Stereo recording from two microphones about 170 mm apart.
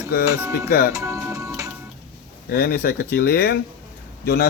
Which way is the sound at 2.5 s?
70° left (ahead or behind).